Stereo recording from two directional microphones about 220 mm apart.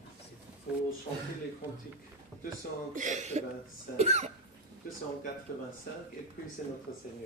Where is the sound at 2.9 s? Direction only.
35° right (ahead or behind).